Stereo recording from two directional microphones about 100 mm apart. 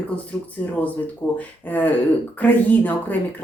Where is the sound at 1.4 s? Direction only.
20° left (ahead or behind).